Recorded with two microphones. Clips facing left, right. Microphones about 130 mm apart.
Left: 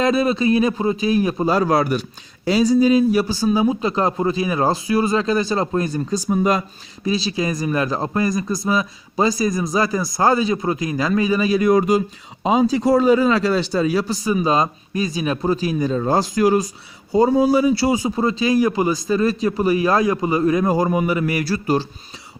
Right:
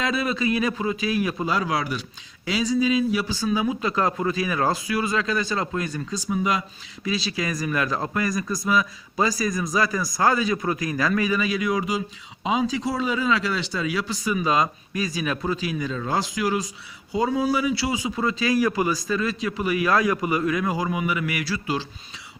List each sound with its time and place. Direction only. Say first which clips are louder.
0.0 s a man's voice: left 7 dB; 40° left (ahead or behind)